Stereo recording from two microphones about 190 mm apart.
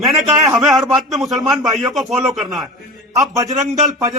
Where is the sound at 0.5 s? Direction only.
Centre (ahead or behind).